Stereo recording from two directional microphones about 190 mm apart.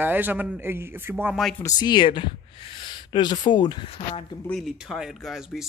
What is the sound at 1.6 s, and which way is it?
Speech, 20° left (ahead or behind).